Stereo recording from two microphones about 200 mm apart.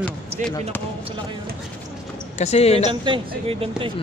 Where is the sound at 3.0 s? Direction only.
25° right (ahead or behind).